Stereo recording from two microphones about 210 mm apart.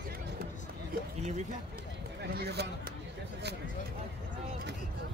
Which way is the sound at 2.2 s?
50° right (ahead or behind).